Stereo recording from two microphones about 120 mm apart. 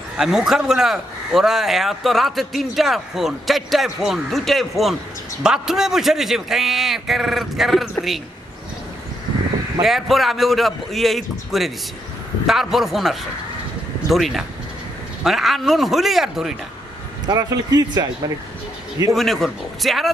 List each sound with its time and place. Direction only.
0.2 s a man's voice: 5° right (ahead or behind)
9.8 s a man's voice: centre (ahead or behind)
17.3 s speech: 35° right (ahead or behind)
19.1 s a man's voice: centre (ahead or behind)